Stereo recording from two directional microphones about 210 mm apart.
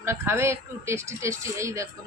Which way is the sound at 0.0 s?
10° right (ahead or behind).